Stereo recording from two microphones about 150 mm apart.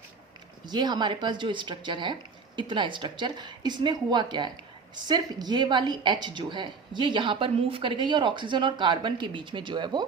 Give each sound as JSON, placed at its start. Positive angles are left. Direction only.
{"t": 0.6, "sound": "a woman's voice", "side_deg": -30}